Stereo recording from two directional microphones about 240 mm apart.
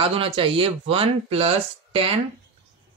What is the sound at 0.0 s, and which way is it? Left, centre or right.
Speech, right.